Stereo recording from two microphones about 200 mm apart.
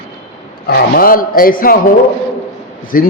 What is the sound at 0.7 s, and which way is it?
A man's voice, 45° left (ahead or behind).